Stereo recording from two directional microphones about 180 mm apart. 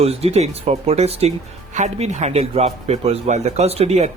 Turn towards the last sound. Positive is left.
turn(degrees=-35)  # may be behind; listen again after turning